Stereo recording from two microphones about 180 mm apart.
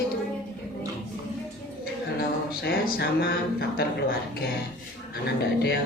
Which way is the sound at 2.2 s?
60° left (ahead or behind).